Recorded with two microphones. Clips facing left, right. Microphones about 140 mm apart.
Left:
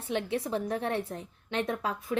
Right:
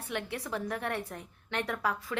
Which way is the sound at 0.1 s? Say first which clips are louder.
Left 6 dB; 25° left (ahead or behind).